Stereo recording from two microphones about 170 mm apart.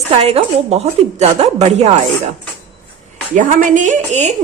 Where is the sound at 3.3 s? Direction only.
50° right (ahead or behind).